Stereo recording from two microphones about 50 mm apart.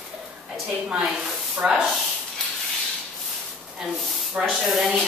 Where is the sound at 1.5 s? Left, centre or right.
Centre.